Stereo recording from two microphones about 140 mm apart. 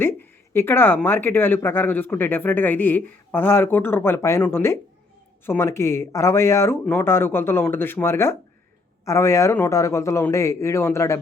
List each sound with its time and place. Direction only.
0.5 s a man's voice: 15° left (ahead or behind)